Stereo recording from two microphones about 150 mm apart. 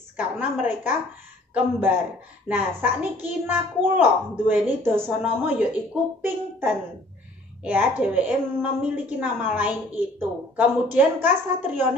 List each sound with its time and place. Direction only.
0.2 s a child's voice: 10° right (ahead or behind)